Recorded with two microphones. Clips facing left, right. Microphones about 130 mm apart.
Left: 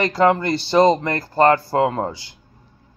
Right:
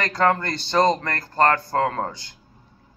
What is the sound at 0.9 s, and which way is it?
Speech, 25° left (ahead or behind).